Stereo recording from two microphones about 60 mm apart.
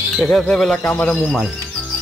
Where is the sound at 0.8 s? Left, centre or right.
Left.